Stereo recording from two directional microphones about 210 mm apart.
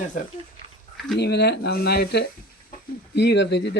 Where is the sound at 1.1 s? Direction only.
50° left (ahead or behind).